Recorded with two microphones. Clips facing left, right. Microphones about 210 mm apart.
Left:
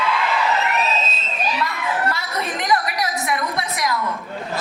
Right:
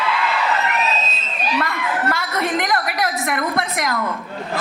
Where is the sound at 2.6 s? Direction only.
55° right (ahead or behind).